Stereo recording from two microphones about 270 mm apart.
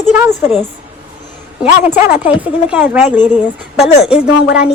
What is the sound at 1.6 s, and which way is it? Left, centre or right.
A woman's voice, centre.